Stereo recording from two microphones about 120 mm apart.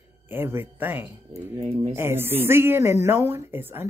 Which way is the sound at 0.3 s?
20° right (ahead or behind).